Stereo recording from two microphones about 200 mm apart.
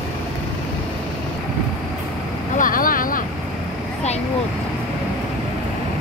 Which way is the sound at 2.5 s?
45° left (ahead or behind).